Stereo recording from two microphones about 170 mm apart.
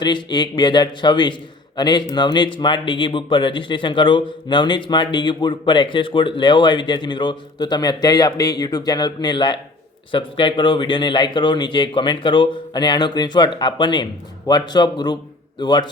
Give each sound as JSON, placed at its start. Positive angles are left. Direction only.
{"t": 0.0, "sound": "a man's voice", "side_deg": 25}